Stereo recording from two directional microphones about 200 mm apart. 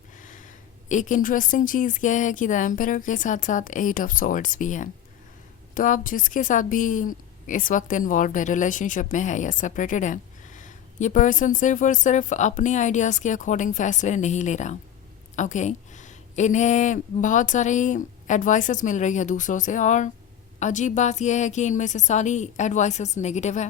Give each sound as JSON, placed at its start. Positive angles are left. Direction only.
{"t": 0.2, "sound": "a woman's voice", "side_deg": 40}